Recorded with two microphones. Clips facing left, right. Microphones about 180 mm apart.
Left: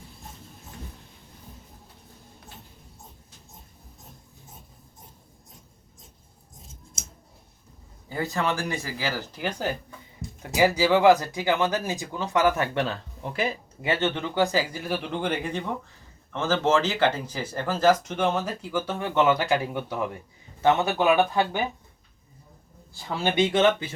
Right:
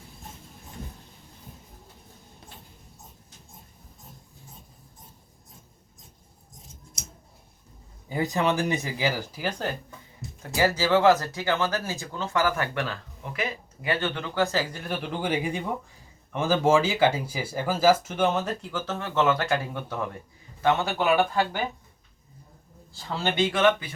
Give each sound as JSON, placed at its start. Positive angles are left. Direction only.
{"t": 8.1, "sound": "speech", "side_deg": -15}
{"t": 9.4, "sound": "speech", "side_deg": 0}
{"t": 10.4, "sound": "speech", "side_deg": 15}
{"t": 23.0, "sound": "speech", "side_deg": 15}